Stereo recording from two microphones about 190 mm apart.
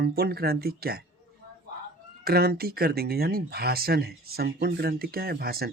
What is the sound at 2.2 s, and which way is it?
Speech, 55° right (ahead or behind).